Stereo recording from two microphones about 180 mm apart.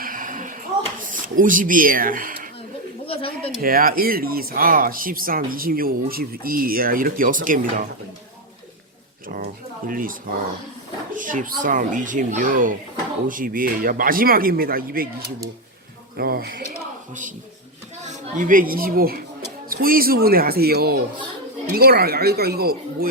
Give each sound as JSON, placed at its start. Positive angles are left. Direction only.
{"t": 0.0, "sound": "a sound", "side_deg": -50}
{"t": 3.1, "sound": "a sound", "side_deg": 30}
{"t": 3.6, "sound": "speech", "side_deg": -55}
{"t": 9.3, "sound": "speech", "side_deg": -50}
{"t": 11.2, "sound": "speech", "side_deg": -50}
{"t": 16.1, "sound": "speech", "side_deg": -60}
{"t": 18.1, "sound": "speech", "side_deg": -45}